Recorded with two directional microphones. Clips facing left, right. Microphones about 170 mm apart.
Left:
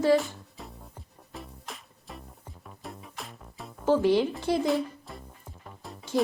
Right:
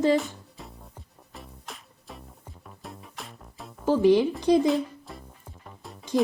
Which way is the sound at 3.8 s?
15° right (ahead or behind).